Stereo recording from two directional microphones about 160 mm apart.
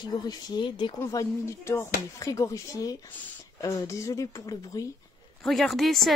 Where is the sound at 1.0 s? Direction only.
15° left (ahead or behind).